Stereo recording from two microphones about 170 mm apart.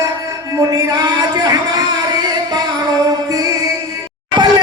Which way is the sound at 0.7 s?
20° right (ahead or behind).